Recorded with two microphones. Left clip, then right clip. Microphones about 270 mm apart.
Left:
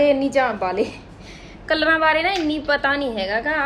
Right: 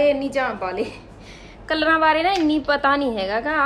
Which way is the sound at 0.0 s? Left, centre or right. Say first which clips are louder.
Left 2 dB; centre.